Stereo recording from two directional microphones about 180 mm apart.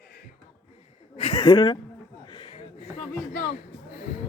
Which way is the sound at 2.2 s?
30° left (ahead or behind).